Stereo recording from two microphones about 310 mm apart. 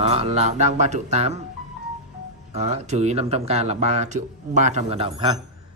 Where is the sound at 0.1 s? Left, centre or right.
Centre.